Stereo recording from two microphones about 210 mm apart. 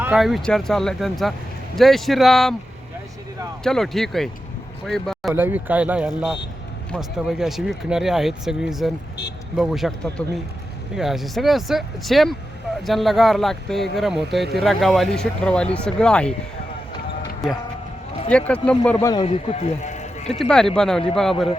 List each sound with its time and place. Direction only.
0.0 s speech: 5° right (ahead or behind)
3.6 s speech: centre (ahead or behind)
5.3 s speech: 10° right (ahead or behind)
17.4 s speech: centre (ahead or behind); by 19.2 s 15° left (ahead or behind)
19.2 s speech: 30° left (ahead or behind)
20.4 s speech: centre (ahead or behind)